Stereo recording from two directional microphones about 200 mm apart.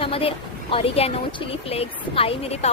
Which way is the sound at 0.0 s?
30° left (ahead or behind).